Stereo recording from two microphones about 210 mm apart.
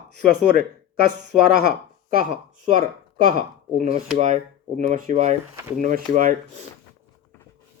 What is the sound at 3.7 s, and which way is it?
Speech, 30° right (ahead or behind).